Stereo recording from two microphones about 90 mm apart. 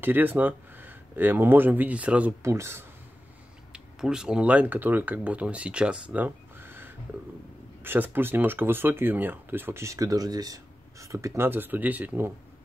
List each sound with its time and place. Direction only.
0.0 s speech: 20° right (ahead or behind)
2.4 s speech: 30° right (ahead or behind)
3.7 s speech: 10° right (ahead or behind)